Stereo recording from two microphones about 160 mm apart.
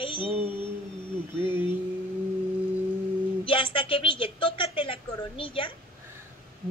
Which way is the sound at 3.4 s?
35° left (ahead or behind).